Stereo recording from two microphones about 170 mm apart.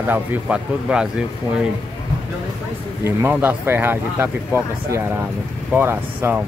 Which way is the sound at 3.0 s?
10° right (ahead or behind).